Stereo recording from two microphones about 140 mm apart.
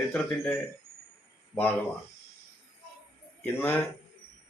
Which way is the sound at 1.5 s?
15° left (ahead or behind).